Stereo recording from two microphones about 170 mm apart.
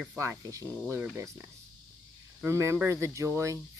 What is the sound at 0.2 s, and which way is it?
Speech, 15° right (ahead or behind).